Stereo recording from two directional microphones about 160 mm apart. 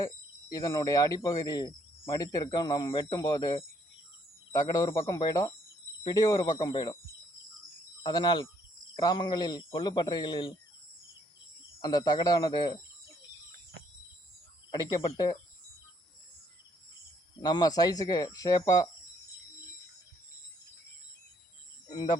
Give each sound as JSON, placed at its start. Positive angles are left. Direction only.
{"t": 0.5, "sound": "speech", "side_deg": 20}
{"t": 8.0, "sound": "speech", "side_deg": 25}
{"t": 11.8, "sound": "speech", "side_deg": 25}
{"t": 14.7, "sound": "speech", "side_deg": 20}
{"t": 17.4, "sound": "speech", "side_deg": 25}
{"t": 21.8, "sound": "speech", "side_deg": 25}